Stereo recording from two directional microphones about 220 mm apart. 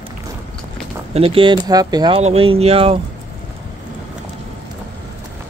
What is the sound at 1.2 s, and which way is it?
Speech, 25° right (ahead or behind).